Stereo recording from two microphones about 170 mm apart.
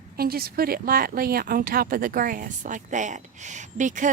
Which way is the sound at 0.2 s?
65° right (ahead or behind).